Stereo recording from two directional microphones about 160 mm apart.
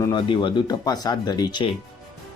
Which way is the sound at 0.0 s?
30° left (ahead or behind).